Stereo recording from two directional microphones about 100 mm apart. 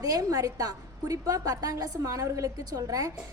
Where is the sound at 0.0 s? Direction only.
35° right (ahead or behind).